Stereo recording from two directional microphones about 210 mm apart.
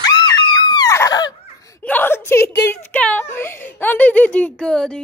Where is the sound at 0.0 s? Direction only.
20° left (ahead or behind).